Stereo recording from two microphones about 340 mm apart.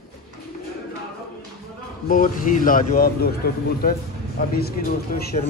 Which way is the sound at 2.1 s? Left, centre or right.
Left.